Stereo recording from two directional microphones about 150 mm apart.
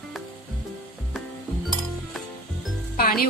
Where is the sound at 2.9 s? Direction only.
80° left.